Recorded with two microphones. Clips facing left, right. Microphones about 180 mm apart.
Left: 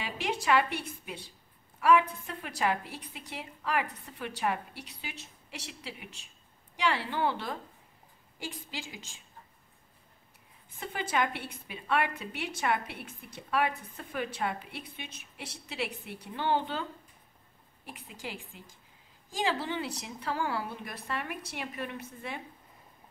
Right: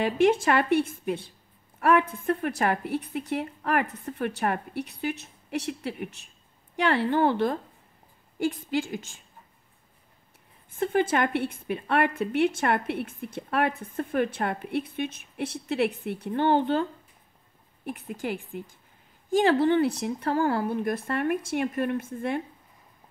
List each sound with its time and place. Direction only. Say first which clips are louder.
0.0 s a woman's voice: right 12 dB; 50° right (ahead or behind)
10.8 s a woman's voice: right 8 dB; 50° right (ahead or behind)
17.8 s a woman's voice: right 11 dB; 55° right (ahead or behind)